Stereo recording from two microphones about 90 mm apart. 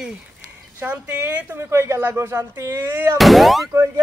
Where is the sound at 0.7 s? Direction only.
20° right (ahead or behind).